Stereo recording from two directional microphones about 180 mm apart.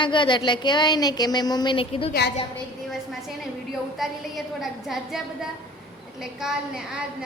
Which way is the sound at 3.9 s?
Centre (ahead or behind).